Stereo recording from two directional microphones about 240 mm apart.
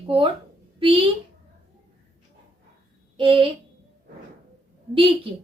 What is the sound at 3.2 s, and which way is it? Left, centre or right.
Speech, right.